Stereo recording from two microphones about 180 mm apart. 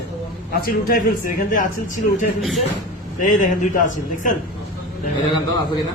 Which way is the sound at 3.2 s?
45° left (ahead or behind).